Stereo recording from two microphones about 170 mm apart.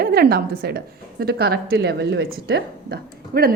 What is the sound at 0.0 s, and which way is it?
A woman's voice, 65° right (ahead or behind).